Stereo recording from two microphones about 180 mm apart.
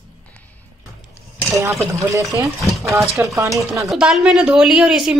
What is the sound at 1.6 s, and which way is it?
Speech, 15° right (ahead or behind).